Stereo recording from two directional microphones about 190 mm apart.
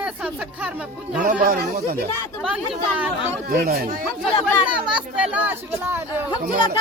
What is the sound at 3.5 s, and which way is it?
Speech, 50° right (ahead or behind).